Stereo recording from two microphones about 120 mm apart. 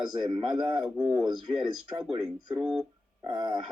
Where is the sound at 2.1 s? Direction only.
35° right (ahead or behind).